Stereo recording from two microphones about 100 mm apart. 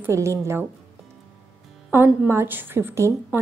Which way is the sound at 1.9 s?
20° right (ahead or behind).